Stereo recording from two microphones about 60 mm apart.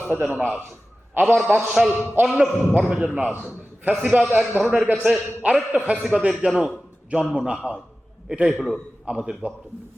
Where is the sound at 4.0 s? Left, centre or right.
Right.